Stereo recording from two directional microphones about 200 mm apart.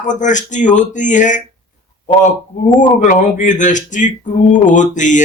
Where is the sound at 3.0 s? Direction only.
40° left (ahead or behind).